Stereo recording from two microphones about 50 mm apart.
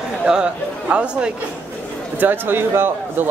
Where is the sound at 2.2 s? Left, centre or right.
Right.